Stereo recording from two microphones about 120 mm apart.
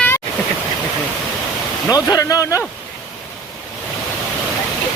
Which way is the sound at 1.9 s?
30° left (ahead or behind).